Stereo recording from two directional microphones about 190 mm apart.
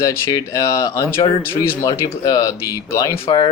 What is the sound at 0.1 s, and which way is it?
Speech, 15° left (ahead or behind).